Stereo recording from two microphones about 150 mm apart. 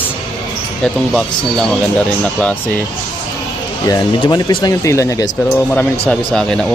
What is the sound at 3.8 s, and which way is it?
Speech, 25° left (ahead or behind).